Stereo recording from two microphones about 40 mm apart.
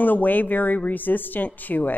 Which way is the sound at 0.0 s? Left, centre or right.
Left.